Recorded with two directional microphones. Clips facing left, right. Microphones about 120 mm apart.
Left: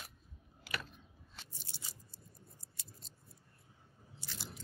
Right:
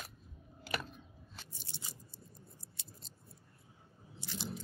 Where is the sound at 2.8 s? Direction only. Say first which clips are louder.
Even; 25° right (ahead or behind).